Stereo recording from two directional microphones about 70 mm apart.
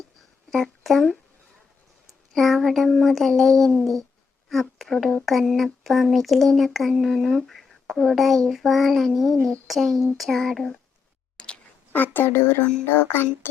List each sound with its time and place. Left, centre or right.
0.5 s speech: centre
2.3 s speech: centre
11.3 s a sound: centre
11.9 s speech: left